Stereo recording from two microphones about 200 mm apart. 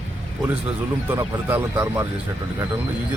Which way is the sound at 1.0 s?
10° right (ahead or behind).